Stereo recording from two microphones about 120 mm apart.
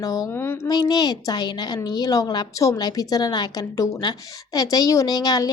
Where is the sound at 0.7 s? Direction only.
35° left (ahead or behind).